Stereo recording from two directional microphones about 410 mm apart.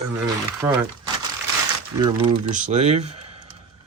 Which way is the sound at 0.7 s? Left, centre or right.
Centre.